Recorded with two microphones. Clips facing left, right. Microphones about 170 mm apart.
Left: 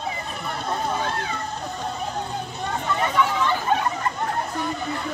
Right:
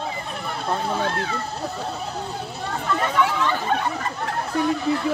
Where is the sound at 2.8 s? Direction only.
Centre (ahead or behind).